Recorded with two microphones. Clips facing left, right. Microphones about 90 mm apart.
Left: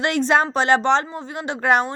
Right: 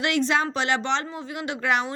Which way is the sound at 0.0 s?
40° left (ahead or behind).